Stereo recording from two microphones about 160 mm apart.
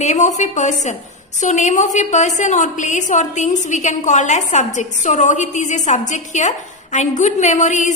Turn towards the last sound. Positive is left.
turn(degrees=50)  # may be behind; listen again after turning